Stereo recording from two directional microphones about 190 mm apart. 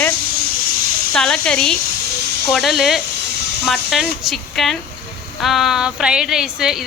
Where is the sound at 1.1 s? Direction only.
5° left (ahead or behind).